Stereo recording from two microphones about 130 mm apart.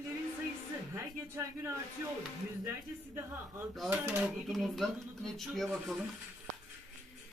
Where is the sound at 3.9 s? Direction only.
20° right (ahead or behind).